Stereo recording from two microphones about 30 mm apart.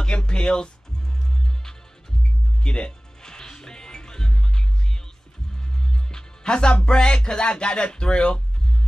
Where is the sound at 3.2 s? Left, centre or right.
Left.